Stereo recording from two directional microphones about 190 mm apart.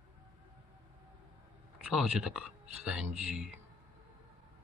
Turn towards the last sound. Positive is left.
turn(degrees=-5)  # may be behind; listen again after turning